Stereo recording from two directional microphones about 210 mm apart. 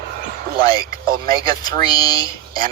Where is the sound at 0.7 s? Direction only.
20° left (ahead or behind).